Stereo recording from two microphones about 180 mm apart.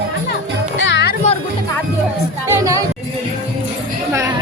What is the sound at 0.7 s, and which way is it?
Music, 80° left.